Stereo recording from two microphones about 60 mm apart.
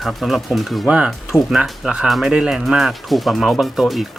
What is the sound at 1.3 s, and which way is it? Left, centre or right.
Speech, centre.